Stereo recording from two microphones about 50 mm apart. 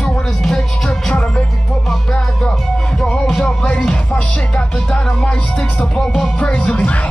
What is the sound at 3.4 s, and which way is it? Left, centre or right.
Music, centre.